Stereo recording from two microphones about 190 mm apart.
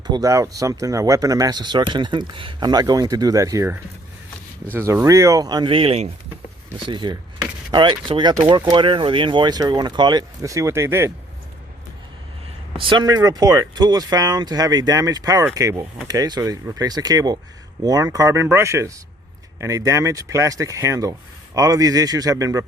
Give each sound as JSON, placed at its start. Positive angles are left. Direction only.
{"t": 0.1, "sound": "speech", "side_deg": -20}
{"t": 12.7, "sound": "speech", "side_deg": -25}